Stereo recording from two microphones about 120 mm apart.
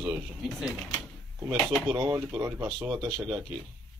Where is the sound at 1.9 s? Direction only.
25° right (ahead or behind).